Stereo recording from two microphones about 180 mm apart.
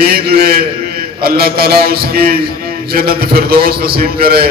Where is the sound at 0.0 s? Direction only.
60° right (ahead or behind).